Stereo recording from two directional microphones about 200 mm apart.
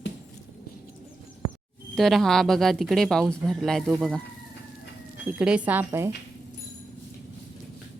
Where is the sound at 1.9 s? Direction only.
Centre (ahead or behind).